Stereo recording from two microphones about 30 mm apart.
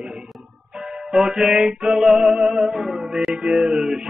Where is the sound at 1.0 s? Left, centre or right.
Centre.